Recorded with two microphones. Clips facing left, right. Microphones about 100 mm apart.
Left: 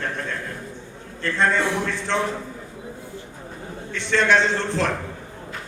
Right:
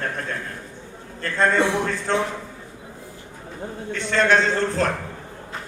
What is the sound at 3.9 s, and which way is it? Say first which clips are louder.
A man's voice: even; 45° right (ahead or behind).